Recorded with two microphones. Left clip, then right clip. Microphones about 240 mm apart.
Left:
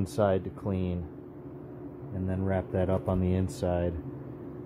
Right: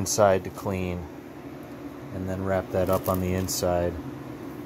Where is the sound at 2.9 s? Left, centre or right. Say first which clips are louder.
Right 5 dB; centre.